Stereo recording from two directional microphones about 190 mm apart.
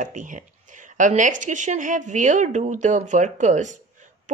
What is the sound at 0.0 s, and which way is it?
Speech, 40° right (ahead or behind).